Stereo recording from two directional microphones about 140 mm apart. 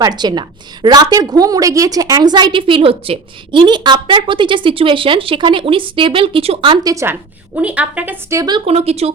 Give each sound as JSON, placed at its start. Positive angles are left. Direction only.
{"t": 0.0, "sound": "a woman's voice", "side_deg": -30}
{"t": 6.9, "sound": "a woman's voice", "side_deg": -15}
{"t": 8.6, "sound": "speech", "side_deg": -45}